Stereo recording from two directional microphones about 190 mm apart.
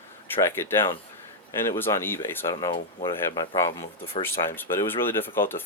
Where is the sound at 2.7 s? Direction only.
25° left (ahead or behind).